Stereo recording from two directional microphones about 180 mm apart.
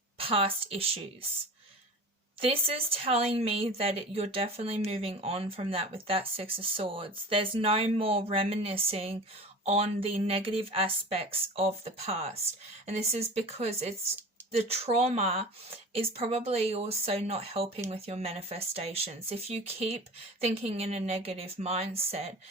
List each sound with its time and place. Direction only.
0.2 s speech: 30° right (ahead or behind)
2.4 s speech: 30° right (ahead or behind)